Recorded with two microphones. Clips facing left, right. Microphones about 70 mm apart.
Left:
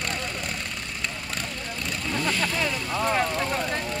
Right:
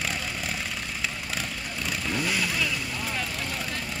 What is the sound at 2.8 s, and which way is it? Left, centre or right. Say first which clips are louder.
Vehicle: left 8 dB; left.